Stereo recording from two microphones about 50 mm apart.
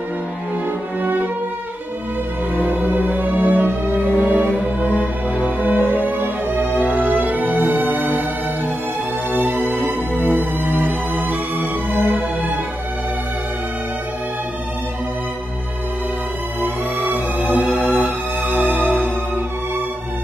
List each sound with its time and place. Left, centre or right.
1.0 s music: right
2.7 s music: right
4.1 s music: left
5.7 s music: right
10.1 s music: left
10.6 s music: right
17.6 s music: left